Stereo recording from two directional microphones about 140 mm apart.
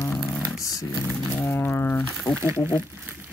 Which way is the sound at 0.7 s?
25° left (ahead or behind).